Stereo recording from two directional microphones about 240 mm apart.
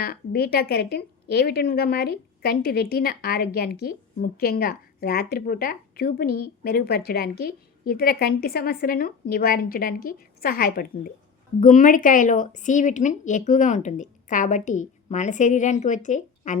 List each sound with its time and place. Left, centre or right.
0.0 s a woman's voice: left